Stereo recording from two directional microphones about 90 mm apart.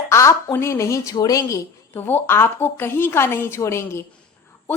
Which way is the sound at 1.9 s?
25° left (ahead or behind).